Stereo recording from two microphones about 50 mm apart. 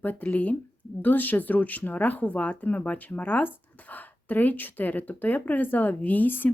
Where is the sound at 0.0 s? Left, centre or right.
Left.